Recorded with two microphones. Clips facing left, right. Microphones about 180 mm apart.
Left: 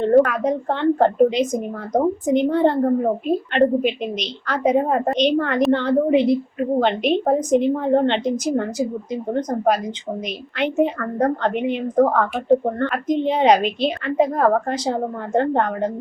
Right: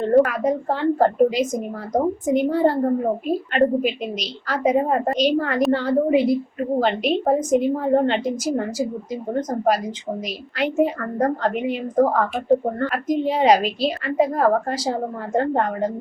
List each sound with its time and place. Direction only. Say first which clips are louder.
0.0 s a woman's voice: left 1 dB; 5° right (ahead or behind)